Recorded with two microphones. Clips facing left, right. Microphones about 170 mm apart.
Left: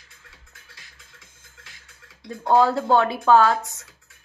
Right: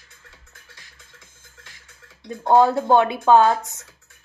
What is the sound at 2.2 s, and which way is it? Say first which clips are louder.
Speech: right 2 dB; 20° right (ahead or behind).